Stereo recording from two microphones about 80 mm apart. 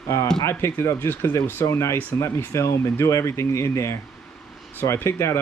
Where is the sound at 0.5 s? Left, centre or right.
Left.